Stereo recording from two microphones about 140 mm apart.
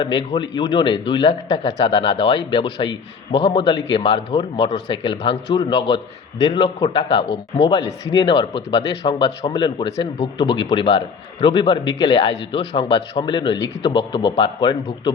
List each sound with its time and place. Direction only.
0.0 s speech: 35° left (ahead or behind)